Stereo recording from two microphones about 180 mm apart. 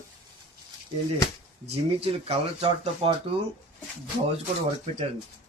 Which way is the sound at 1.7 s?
30° right (ahead or behind).